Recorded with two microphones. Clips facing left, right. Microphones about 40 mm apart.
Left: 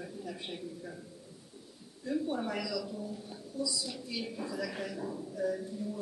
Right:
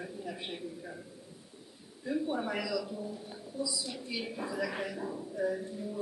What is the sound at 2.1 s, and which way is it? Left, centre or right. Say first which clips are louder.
A man's voice: right 1 dB; centre.